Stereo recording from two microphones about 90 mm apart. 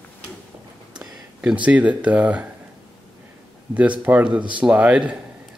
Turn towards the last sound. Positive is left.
turn(degrees=-15)  # may be behind; listen again after turning